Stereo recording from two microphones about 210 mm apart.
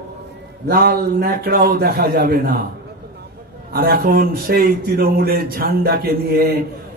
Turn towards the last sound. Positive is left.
turn(degrees=-45)  # may be behind; listen again after turning